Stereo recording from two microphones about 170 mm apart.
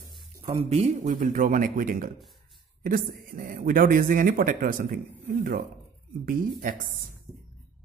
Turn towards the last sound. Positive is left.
turn(degrees=-55)  # may be behind; listen again after turning